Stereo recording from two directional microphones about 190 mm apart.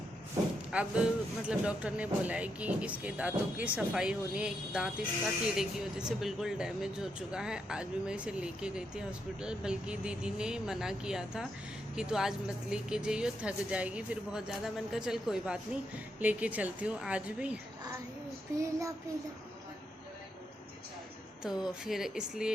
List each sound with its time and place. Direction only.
0.7 s speech: 5° right (ahead or behind)
18.5 s speech: 15° right (ahead or behind)
21.4 s speech: centre (ahead or behind)